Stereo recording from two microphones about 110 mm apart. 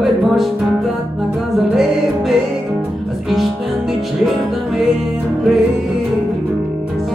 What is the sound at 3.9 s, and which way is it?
Music, centre (ahead or behind).